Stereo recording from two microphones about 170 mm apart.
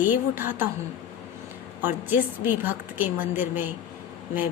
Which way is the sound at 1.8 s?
10° right (ahead or behind).